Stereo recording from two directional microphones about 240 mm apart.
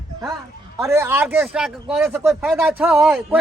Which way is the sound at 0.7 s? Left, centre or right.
Centre.